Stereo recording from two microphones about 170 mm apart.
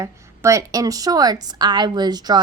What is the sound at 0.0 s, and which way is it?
A woman's voice, 20° right (ahead or behind).